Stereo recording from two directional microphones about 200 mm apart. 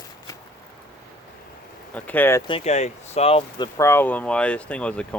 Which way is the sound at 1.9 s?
10° left (ahead or behind).